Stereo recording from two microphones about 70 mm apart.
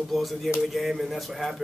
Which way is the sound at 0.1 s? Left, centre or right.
Centre.